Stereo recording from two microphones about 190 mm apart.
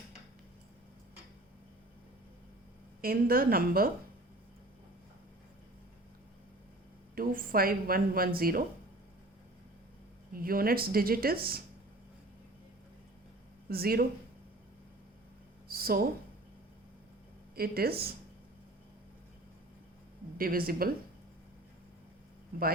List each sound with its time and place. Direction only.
3.0 s speech: 50° right (ahead or behind)
7.2 s speech: 50° right (ahead or behind)
10.3 s speech: 50° right (ahead or behind)
13.7 s speech: 55° right (ahead or behind)
15.7 s a sound: 50° right (ahead or behind)
17.5 s speech: 55° right (ahead or behind)
20.4 s speech: 50° right (ahead or behind)